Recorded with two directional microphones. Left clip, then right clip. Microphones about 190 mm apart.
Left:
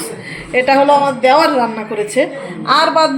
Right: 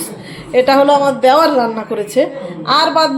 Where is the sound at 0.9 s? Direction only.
25° right (ahead or behind).